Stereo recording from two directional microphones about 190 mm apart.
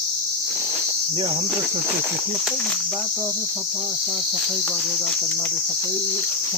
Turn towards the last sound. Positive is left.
turn(degrees=10)  # may be behind; listen again after turning